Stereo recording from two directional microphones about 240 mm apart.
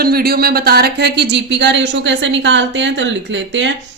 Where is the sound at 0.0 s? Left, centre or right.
Right.